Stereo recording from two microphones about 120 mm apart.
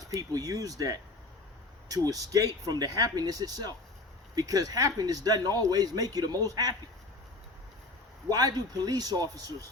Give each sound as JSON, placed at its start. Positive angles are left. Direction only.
{"t": 0.0, "sound": "speech", "side_deg": -30}
{"t": 8.3, "sound": "speech", "side_deg": -30}